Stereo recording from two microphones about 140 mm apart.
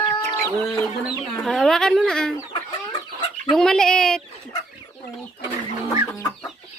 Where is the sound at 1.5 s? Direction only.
Centre (ahead or behind).